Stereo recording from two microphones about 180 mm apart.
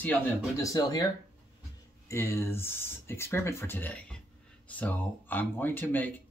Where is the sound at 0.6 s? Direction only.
20° left (ahead or behind).